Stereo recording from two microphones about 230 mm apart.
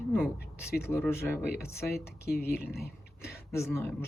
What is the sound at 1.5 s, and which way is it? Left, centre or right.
Speech, left.